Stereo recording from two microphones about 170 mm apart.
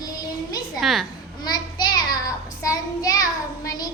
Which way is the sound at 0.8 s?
Centre (ahead or behind).